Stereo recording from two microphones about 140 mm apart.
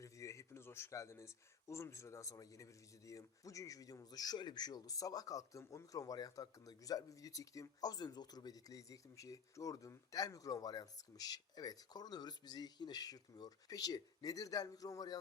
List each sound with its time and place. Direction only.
0.0 s speech: 20° left (ahead or behind)